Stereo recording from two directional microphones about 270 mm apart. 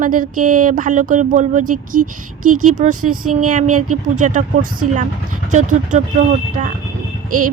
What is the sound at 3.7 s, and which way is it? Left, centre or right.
Speech, right.